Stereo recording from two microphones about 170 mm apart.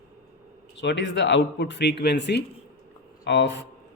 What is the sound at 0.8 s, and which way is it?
Speech, 90° left.